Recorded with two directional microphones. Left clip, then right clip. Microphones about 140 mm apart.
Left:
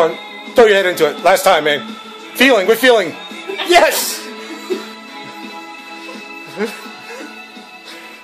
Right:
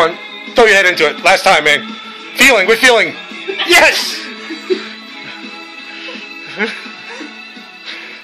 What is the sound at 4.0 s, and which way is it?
Music, 20° left (ahead or behind).